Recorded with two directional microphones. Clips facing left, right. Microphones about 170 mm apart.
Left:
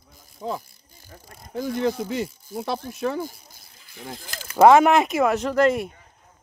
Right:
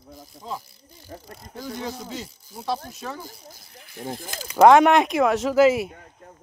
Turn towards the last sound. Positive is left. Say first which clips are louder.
# right 2 dB
turn(degrees=-5)  # may be behind; listen again after turning